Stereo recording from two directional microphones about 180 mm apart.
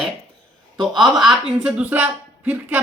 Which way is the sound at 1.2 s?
5° right (ahead or behind).